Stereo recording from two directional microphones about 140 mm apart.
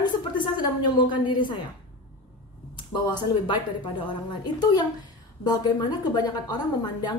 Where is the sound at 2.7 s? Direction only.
30° left (ahead or behind).